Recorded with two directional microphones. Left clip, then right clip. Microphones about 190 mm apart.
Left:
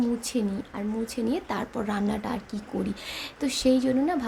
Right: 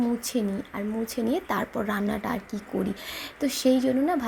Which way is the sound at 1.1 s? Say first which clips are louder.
Right 3 dB; 15° right (ahead or behind).